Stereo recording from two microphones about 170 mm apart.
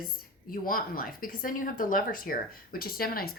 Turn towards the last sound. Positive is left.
turn(degrees=60)  # may be behind; listen again after turning